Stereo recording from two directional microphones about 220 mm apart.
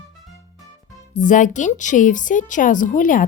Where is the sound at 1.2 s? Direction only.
35° left (ahead or behind).